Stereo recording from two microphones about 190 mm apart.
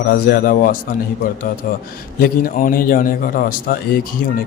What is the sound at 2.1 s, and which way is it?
Speech, 50° left (ahead or behind).